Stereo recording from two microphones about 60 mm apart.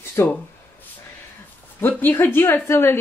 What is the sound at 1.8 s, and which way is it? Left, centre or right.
Speech, left.